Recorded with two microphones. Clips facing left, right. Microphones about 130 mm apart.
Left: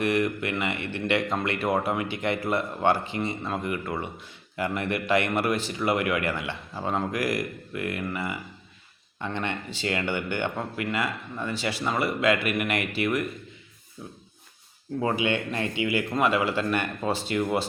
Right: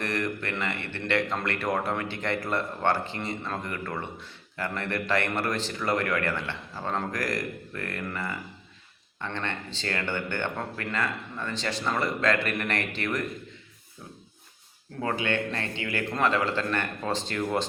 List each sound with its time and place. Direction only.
0.0 s speech: 10° left (ahead or behind)
15.0 s speech: 15° left (ahead or behind)